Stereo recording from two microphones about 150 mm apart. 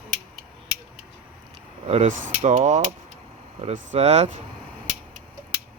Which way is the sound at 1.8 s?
45° right (ahead or behind).